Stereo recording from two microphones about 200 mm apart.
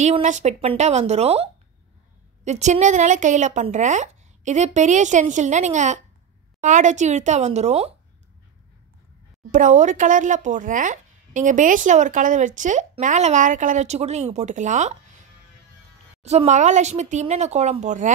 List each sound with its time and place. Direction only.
0.0 s speech: 35° right (ahead or behind)
9.5 s speech: 40° right (ahead or behind)
16.2 s speech: 35° right (ahead or behind)